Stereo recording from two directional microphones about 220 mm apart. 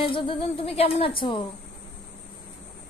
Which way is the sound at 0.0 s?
25° left (ahead or behind).